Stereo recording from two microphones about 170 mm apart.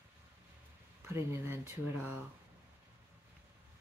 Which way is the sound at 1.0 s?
15° right (ahead or behind).